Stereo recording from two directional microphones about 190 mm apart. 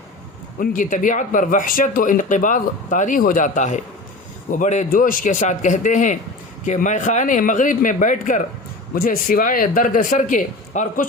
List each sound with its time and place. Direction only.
0.6 s a man's voice: 45° left (ahead or behind)